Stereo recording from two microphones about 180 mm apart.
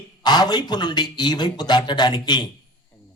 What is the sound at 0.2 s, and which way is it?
A man's voice, 25° left (ahead or behind).